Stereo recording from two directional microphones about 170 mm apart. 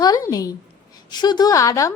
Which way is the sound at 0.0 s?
20° left (ahead or behind).